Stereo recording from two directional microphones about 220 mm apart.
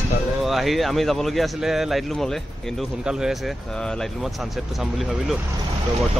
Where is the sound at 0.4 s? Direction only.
Centre (ahead or behind).